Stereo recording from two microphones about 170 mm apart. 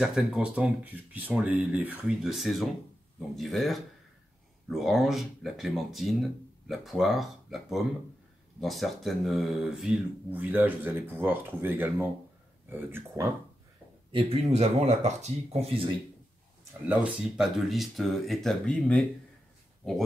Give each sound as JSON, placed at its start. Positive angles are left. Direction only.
{"t": 0.0, "sound": "speech", "side_deg": -5}
{"t": 8.5, "sound": "speech", "side_deg": 0}
{"t": 14.1, "sound": "speech", "side_deg": -35}
{"t": 16.8, "sound": "speech", "side_deg": -10}